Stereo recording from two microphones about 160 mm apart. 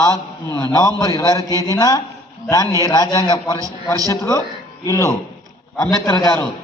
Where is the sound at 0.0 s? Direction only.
20° left (ahead or behind).